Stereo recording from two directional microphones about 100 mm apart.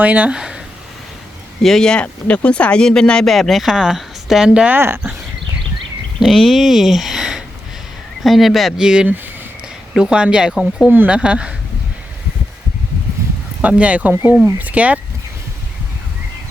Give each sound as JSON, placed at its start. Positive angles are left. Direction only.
{"t": 0.0, "sound": "speech", "side_deg": -15}
{"t": 1.6, "sound": "speech", "side_deg": 5}
{"t": 6.1, "sound": "speech", "side_deg": 0}
{"t": 13.6, "sound": "speech", "side_deg": -15}